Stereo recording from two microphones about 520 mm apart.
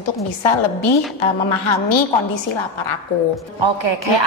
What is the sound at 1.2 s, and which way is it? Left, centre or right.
A woman's voice, left.